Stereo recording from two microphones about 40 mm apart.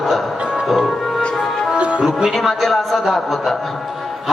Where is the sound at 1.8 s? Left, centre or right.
Right.